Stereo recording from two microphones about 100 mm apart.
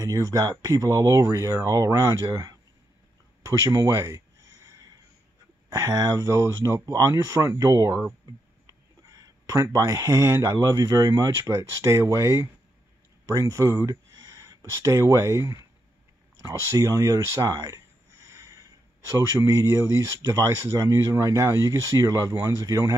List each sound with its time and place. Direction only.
0.0 s speech: 35° right (ahead or behind)
3.4 s a sound: 35° right (ahead or behind)
5.7 s speech: 35° right (ahead or behind)
9.0 s speech: 35° right (ahead or behind)